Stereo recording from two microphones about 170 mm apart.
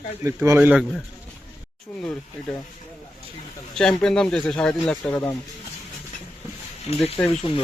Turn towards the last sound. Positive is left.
turn(degrees=30)  # may be behind; listen again after turning